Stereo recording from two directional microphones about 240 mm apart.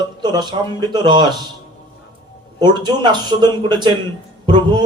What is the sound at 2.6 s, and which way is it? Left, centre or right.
A man's voice, centre.